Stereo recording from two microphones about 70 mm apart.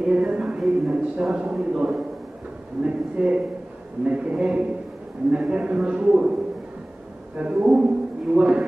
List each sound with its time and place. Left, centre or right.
0.0 s a sound: centre
1.4 s a man's voice: centre
7.3 s a man's voice: centre